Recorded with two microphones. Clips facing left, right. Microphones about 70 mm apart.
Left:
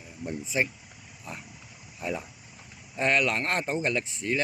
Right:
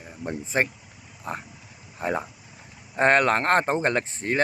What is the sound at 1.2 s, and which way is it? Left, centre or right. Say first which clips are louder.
Dog: right 8 dB; right.